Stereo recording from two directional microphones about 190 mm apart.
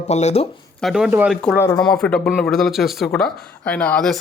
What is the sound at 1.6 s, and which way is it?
Speech, 20° left (ahead or behind).